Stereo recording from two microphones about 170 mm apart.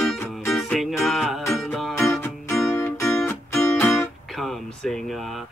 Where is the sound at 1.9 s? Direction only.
15° left (ahead or behind).